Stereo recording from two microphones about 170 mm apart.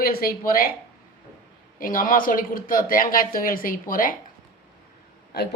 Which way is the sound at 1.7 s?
55° left (ahead or behind).